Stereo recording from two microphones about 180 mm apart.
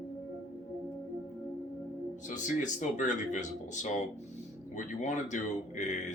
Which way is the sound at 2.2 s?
45° left (ahead or behind).